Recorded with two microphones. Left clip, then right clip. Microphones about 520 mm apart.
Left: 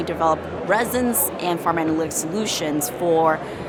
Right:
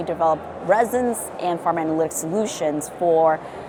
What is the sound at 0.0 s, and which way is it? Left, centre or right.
A woman's voice, right.